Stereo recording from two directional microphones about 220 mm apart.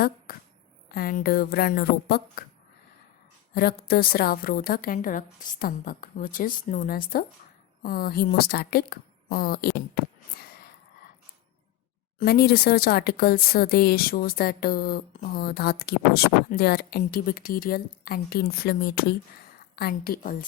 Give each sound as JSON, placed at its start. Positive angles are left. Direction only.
{"t": 0.3, "sound": "a sound", "side_deg": 45}
{"t": 0.9, "sound": "speech", "side_deg": 40}
{"t": 3.5, "sound": "a woman's voice", "side_deg": 45}
{"t": 12.2, "sound": "speech", "side_deg": 45}